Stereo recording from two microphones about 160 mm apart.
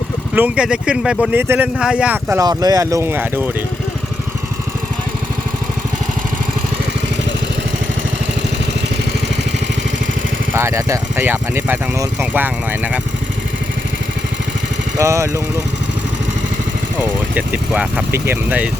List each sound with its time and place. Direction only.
0.3 s speech: 10° right (ahead or behind)
2.3 s speech: 25° right (ahead or behind)
10.5 s speech: 15° right (ahead or behind)
14.9 s speech: 20° right (ahead or behind)
17.3 s speech: 10° right (ahead or behind)